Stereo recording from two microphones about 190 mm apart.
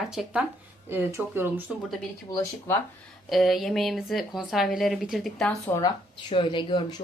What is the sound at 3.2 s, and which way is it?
A woman's voice, centre (ahead or behind).